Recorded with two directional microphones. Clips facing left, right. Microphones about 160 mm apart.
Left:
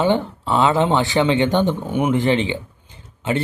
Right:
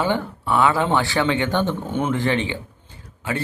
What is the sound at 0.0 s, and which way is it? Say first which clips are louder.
Speech: left 4 dB; 20° left (ahead or behind).